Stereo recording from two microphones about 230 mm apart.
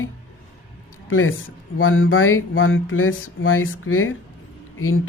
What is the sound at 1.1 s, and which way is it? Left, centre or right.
Speech, left.